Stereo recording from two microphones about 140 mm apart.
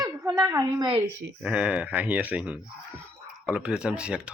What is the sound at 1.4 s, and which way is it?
Speech, 5° right (ahead or behind).